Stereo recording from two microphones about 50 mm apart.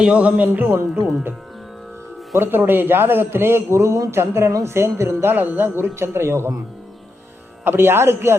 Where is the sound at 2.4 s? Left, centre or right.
Right.